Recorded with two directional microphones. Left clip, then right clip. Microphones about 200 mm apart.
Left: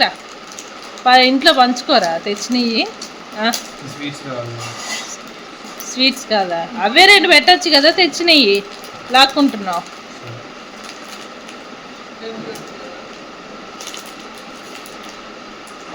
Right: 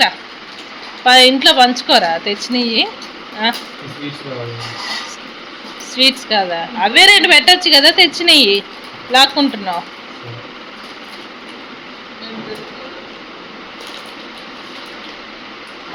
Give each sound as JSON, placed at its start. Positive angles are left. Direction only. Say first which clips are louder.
{"t": 1.0, "sound": "a woman's voice", "louder": "right 2 dB", "side_deg": 15}
{"t": 5.9, "sound": "a woman's voice", "louder": "right 3 dB", "side_deg": 20}